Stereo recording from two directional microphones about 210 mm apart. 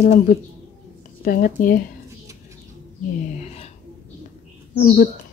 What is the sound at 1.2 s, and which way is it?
Speech, 40° left (ahead or behind).